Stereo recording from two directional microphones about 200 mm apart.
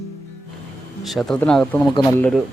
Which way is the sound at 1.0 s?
Centre (ahead or behind).